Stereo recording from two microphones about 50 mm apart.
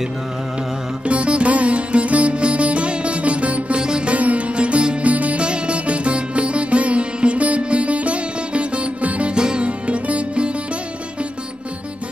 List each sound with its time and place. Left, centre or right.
1.0 s music: right